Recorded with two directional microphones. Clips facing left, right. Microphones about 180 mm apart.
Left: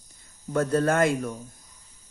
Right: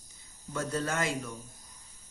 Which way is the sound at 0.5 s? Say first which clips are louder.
Left 10 dB; 55° left (ahead or behind).